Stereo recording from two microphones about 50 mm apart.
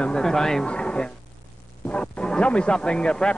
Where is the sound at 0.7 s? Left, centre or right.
Centre.